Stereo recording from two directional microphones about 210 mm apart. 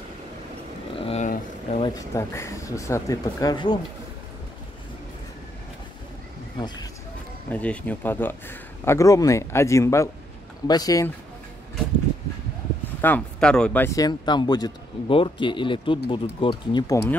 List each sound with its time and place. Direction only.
0.9 s a sound: 30° left (ahead or behind)
2.0 s speech: 15° left (ahead or behind)
7.4 s speech: 5° left (ahead or behind)
13.0 s speech: 5° left (ahead or behind)